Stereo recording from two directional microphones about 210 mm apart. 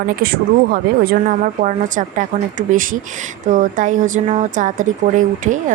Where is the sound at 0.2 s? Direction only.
45° right (ahead or behind).